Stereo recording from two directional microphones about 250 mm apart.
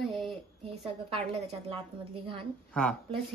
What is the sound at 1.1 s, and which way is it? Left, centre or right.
Speech, right.